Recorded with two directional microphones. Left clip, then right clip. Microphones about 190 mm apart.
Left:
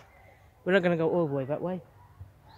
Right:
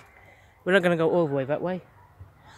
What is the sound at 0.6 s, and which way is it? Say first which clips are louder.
A man's voice: right 4 dB; 10° right (ahead or behind).